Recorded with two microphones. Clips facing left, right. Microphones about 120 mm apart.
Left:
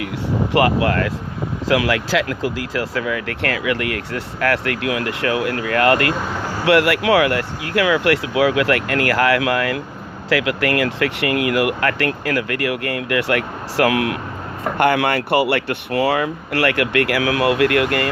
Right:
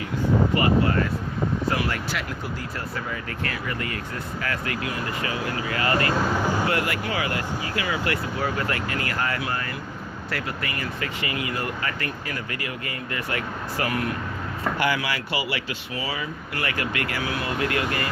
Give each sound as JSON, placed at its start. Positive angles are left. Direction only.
{"t": 0.5, "sound": "speech", "side_deg": 75}
{"t": 1.6, "sound": "speech", "side_deg": 90}
{"t": 6.3, "sound": "a sound", "side_deg": -10}
{"t": 6.7, "sound": "speech", "side_deg": 75}
{"t": 14.8, "sound": "speech", "side_deg": 60}